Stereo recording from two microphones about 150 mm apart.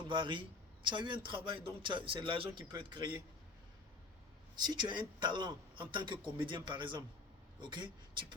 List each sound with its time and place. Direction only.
0.1 s speech: 35° right (ahead or behind)
4.5 s speech: 30° right (ahead or behind)